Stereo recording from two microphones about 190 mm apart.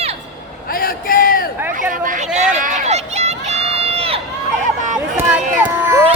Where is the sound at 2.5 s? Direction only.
40° right (ahead or behind).